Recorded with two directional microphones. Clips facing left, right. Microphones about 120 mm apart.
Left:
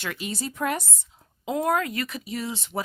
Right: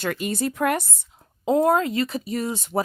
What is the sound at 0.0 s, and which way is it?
Speech, 45° right (ahead or behind).